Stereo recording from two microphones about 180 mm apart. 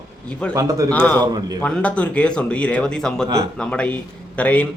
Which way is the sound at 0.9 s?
10° left (ahead or behind).